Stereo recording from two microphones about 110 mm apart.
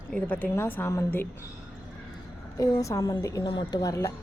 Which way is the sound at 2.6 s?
30° left (ahead or behind).